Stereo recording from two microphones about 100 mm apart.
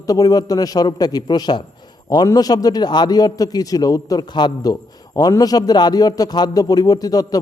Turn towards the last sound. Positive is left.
turn(degrees=40)  # may be behind; listen again after turning